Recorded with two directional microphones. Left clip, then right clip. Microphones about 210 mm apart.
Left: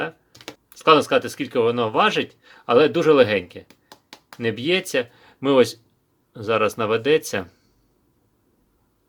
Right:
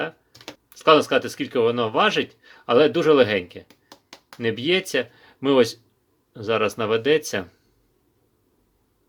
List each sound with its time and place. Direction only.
0.0 s speech: 5° left (ahead or behind)
3.7 s a sound: 15° left (ahead or behind)
4.4 s speech: centre (ahead or behind)